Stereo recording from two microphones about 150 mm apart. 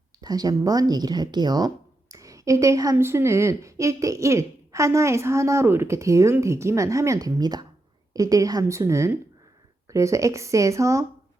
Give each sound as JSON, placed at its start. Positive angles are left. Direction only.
{"t": 0.2, "sound": "speech", "side_deg": -25}